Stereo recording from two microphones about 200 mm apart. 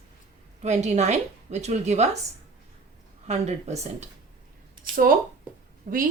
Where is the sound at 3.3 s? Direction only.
35° right (ahead or behind).